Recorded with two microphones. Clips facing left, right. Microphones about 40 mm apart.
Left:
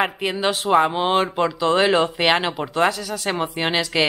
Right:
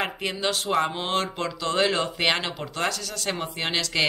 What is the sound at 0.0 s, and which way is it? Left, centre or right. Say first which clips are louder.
Speech: left 6 dB; centre.